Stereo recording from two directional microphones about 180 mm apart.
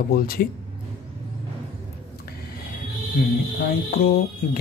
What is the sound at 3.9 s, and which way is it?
Speech, 60° left (ahead or behind).